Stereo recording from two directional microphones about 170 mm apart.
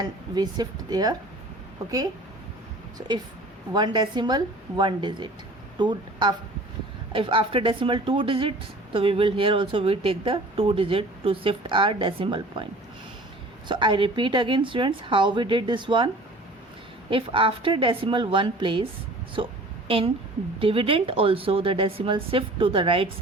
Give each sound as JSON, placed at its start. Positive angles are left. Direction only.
{"t": 0.0, "sound": "a woman's voice", "side_deg": -25}
{"t": 3.7, "sound": "a woman's voice", "side_deg": -25}
{"t": 13.7, "sound": "a woman's voice", "side_deg": -30}
{"t": 17.1, "sound": "speech", "side_deg": -30}
{"t": 20.6, "sound": "speech", "side_deg": -30}